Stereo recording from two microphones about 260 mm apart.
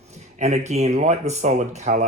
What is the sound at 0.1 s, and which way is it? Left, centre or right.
Speech, right.